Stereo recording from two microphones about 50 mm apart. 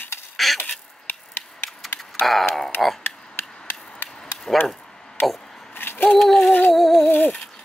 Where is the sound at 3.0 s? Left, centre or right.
Left.